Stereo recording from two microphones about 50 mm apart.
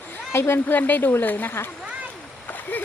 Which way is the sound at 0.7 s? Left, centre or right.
Left.